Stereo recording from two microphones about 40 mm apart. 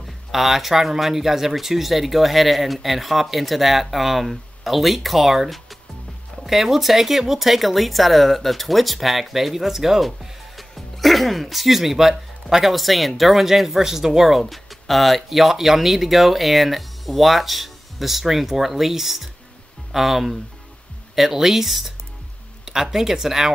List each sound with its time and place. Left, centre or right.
0.0 s speech: centre